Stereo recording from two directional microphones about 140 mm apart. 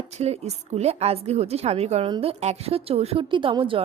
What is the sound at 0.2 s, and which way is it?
A woman's voice, 50° right (ahead or behind).